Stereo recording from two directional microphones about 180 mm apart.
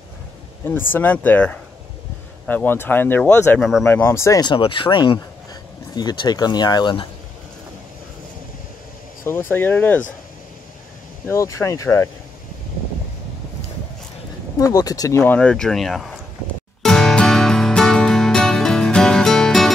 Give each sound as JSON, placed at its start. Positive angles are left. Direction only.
{"t": 0.9, "sound": "speech", "side_deg": 10}
{"t": 9.2, "sound": "speech", "side_deg": 10}
{"t": 11.2, "sound": "speech", "side_deg": 15}
{"t": 14.6, "sound": "speech", "side_deg": 20}
{"t": 16.8, "sound": "music", "side_deg": 5}